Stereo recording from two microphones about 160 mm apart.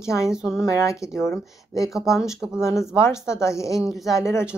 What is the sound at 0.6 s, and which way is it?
Speech, 20° left (ahead or behind).